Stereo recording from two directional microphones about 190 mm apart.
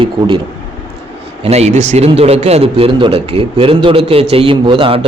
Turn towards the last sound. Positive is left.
turn(degrees=-30)  # may be behind; listen again after turning